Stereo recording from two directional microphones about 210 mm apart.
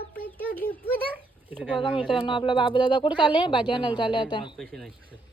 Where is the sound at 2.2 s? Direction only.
25° left (ahead or behind).